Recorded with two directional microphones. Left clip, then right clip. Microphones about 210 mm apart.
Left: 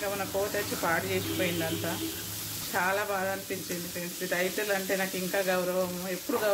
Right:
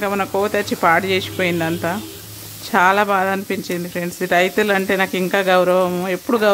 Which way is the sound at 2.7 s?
50° right (ahead or behind).